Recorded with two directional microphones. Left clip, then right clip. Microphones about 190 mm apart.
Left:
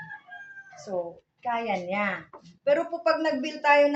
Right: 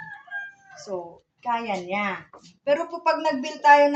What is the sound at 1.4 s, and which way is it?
A woman's voice, 15° left (ahead or behind).